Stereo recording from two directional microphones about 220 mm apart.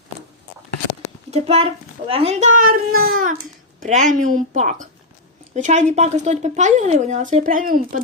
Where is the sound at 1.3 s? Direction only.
30° right (ahead or behind).